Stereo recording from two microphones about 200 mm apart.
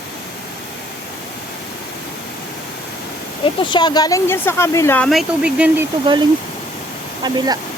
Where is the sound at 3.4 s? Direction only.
25° left (ahead or behind); by 5.8 s 5° right (ahead or behind).